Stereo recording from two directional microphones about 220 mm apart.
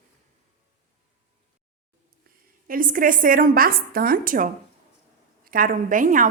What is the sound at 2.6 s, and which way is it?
A woman's voice, 40° right (ahead or behind).